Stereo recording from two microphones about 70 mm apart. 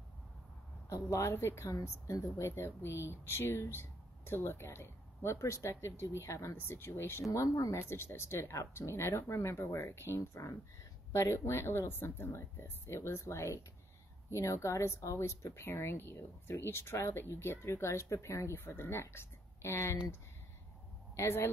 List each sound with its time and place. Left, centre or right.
0.8 s speech: left
1.7 s speech: left
7.2 s speech: left
7.9 s speech: left
21.2 s speech: left